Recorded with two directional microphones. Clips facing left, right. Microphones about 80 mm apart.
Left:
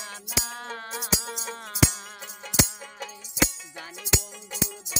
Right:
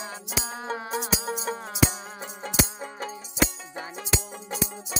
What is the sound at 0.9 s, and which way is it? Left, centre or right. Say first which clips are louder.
Music: right 2 dB; right.